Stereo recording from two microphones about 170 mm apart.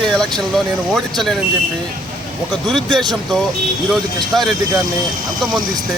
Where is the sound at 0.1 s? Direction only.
5° left (ahead or behind).